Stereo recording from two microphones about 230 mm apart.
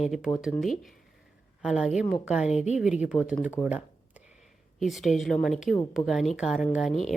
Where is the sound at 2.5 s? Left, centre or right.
Left.